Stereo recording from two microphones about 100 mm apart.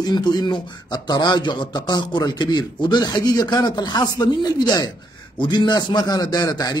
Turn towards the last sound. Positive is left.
turn(degrees=40)  # may be behind; listen again after turning